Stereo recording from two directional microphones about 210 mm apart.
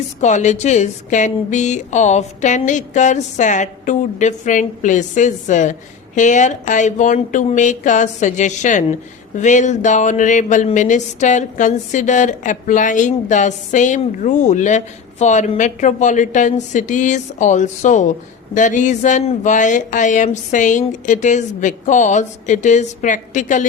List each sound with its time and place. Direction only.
0.2 s speech: 35° left (ahead or behind)